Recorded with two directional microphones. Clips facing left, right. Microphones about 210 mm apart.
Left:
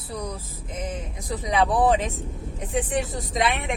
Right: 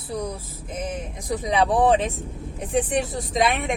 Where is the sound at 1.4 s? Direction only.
30° right (ahead or behind).